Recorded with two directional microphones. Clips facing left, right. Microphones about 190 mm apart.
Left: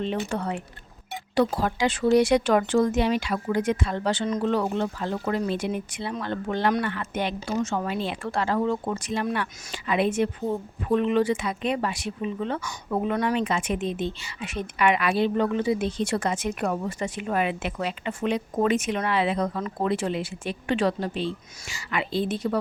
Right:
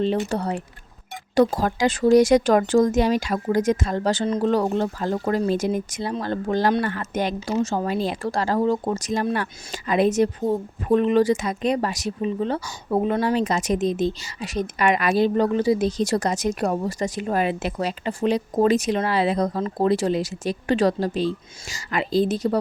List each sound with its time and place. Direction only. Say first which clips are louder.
0.3 s speech: right 3 dB; 35° right (ahead or behind)